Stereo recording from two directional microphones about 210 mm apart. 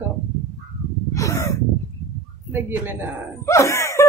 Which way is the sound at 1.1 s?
15° left (ahead or behind).